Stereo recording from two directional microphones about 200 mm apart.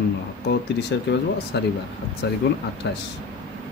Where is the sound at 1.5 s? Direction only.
60° left (ahead or behind).